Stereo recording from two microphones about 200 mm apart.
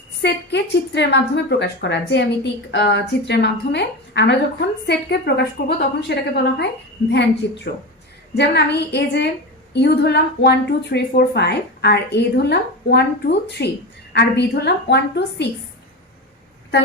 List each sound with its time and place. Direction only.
0.2 s a woman's voice: 60° left (ahead or behind)